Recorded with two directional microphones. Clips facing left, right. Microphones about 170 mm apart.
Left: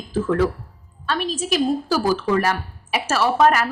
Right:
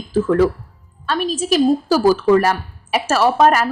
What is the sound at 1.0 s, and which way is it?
A woman's voice, 40° right (ahead or behind).